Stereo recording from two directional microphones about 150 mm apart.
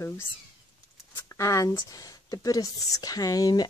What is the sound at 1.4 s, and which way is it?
A woman's voice, 20° left (ahead or behind).